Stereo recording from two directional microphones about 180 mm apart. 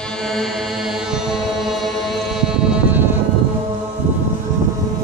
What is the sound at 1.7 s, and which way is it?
Music, centre (ahead or behind).